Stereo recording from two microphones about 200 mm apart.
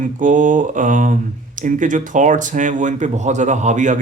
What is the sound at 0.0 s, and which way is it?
Speech, 40° right (ahead or behind).